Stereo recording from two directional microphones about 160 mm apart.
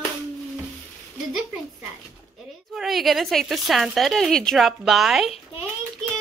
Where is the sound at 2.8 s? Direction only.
Centre (ahead or behind).